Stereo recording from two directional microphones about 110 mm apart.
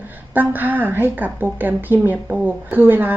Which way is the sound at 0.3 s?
15° right (ahead or behind).